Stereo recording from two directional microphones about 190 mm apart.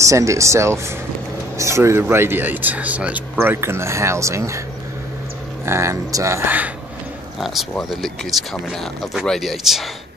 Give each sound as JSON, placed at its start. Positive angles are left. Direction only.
{"t": 0.0, "sound": "speech", "side_deg": -15}
{"t": 5.7, "sound": "speech", "side_deg": -15}